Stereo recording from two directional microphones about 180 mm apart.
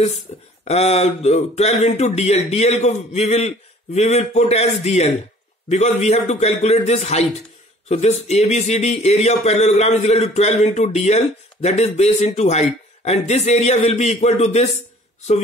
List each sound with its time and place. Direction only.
0.7 s speech: 35° left (ahead or behind)